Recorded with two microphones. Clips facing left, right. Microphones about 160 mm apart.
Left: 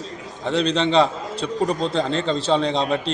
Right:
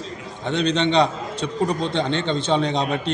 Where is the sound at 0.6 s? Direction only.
30° left (ahead or behind).